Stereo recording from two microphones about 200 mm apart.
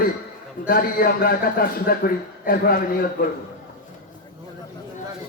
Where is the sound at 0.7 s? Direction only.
45° left (ahead or behind).